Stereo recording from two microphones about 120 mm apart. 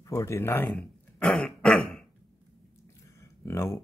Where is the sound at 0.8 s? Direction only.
5° left (ahead or behind).